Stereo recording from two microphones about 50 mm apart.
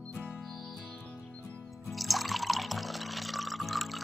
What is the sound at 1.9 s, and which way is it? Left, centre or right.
Music, centre.